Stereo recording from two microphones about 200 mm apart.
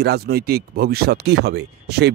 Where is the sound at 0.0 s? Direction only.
55° right (ahead or behind).